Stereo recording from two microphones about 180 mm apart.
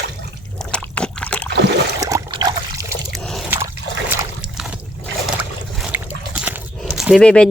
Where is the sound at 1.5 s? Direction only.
70° right (ahead or behind).